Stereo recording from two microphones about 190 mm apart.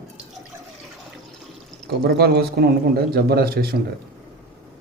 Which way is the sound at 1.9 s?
60° right (ahead or behind).